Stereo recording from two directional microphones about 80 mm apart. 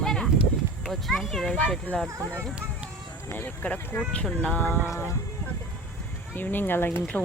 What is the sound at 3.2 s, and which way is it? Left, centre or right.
Speech, left.